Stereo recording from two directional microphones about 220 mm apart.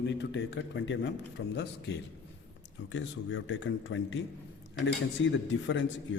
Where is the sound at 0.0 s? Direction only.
50° left (ahead or behind).